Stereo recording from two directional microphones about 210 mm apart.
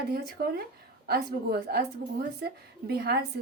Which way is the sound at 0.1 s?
45° right (ahead or behind).